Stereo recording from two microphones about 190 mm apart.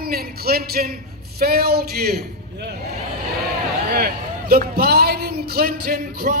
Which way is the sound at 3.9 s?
50° right (ahead or behind).